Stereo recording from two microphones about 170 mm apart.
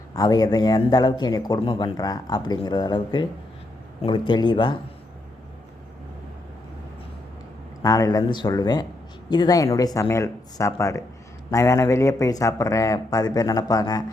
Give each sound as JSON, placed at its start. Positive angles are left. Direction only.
{"t": 0.1, "sound": "speech", "side_deg": 20}
{"t": 7.8, "sound": "speech", "side_deg": 20}